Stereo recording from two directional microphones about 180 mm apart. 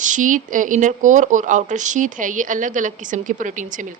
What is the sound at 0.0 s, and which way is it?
Speech, 45° right (ahead or behind).